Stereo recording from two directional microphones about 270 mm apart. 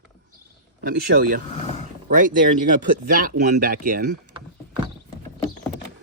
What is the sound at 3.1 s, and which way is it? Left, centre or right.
Speech, right.